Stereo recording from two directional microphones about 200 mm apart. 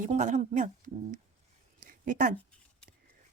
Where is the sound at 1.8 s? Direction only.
40° right (ahead or behind).